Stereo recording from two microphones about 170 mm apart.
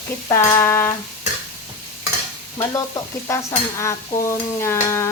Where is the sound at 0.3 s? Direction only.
15° left (ahead or behind).